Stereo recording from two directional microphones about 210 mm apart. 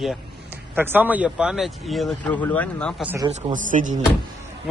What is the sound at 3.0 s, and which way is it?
Speech, 10° right (ahead or behind).